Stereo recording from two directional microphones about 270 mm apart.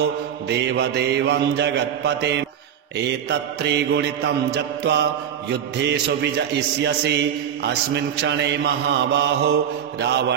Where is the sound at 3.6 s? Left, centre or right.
Right.